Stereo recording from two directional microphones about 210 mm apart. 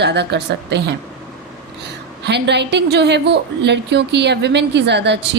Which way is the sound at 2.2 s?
55° right (ahead or behind).